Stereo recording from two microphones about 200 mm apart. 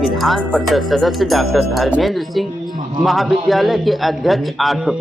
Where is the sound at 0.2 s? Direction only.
Centre (ahead or behind).